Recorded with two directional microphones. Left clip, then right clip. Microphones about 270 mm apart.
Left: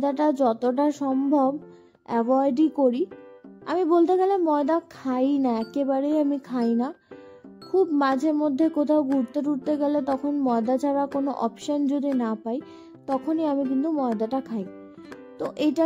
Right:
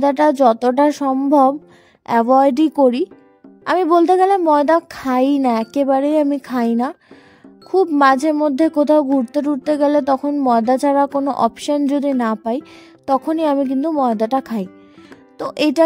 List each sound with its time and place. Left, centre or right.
0.0 s a woman's voice: right